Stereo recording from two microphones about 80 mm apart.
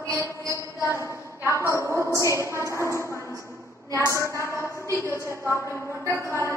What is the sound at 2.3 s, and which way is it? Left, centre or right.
Speech, right.